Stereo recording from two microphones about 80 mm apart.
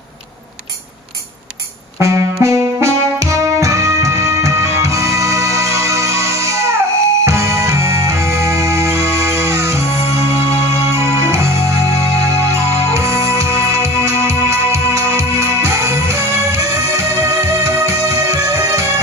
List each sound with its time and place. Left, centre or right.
2.0 s music: right